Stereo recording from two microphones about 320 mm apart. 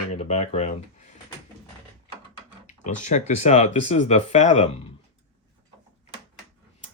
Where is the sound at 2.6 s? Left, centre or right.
Left.